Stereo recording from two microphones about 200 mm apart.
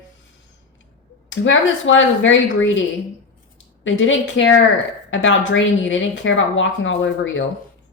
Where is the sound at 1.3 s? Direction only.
70° left (ahead or behind).